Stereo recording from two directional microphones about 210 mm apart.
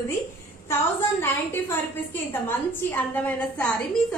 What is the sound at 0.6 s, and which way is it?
A woman's voice, 10° left (ahead or behind).